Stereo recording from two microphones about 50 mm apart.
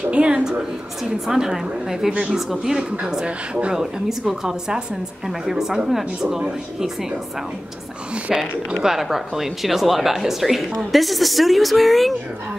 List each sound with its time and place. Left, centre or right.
0.0 s a woman's voice: right
1.2 s a woman's voice: centre
2.7 s speech: centre
3.7 s a woman's voice: centre
8.3 s speech: centre